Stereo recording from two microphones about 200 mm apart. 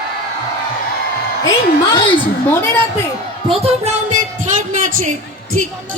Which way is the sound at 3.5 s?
30° right (ahead or behind).